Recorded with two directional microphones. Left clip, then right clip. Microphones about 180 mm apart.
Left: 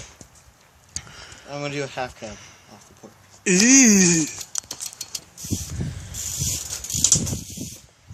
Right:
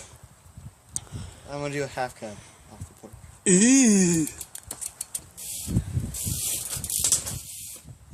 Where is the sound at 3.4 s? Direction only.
20° right (ahead or behind).